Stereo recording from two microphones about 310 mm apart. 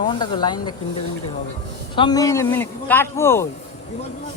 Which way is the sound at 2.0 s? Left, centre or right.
Centre.